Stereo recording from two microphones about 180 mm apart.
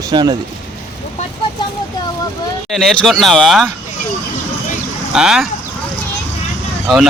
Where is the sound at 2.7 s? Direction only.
Centre (ahead or behind).